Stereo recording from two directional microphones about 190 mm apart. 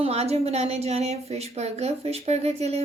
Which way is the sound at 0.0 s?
30° right (ahead or behind).